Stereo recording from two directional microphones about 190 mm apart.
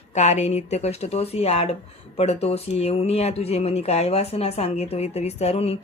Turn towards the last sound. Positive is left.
turn(degrees=35)  # may be behind; listen again after turning